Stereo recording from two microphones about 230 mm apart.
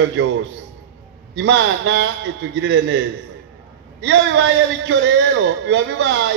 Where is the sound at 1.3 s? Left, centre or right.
Right.